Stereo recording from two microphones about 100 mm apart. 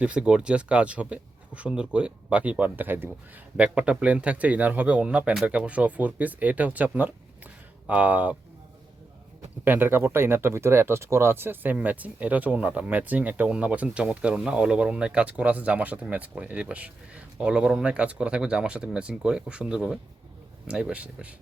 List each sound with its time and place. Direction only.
0.0 s speech: 10° right (ahead or behind)
9.6 s speech: 20° right (ahead or behind)